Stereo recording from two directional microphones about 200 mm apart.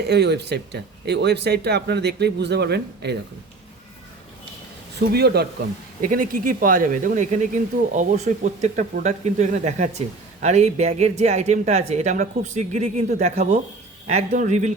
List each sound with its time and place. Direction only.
0.0 s speech: 55° right (ahead or behind)
5.1 s speech: 55° right (ahead or behind)
6.0 s speech: 45° right (ahead or behind)